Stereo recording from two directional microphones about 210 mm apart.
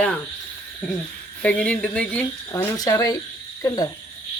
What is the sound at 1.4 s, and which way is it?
Speech, 5° left (ahead or behind).